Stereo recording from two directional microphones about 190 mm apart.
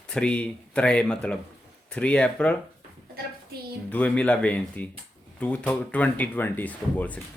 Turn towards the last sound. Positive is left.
turn(degrees=10)  # may be behind; listen again after turning